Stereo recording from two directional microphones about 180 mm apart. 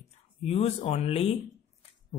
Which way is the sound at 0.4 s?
35° left (ahead or behind).